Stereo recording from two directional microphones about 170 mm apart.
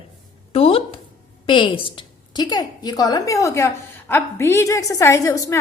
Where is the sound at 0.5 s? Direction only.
35° left (ahead or behind).